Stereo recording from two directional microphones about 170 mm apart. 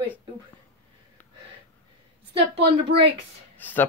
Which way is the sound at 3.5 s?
10° left (ahead or behind).